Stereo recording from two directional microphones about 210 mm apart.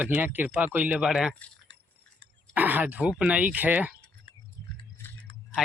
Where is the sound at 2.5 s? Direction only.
10° right (ahead or behind).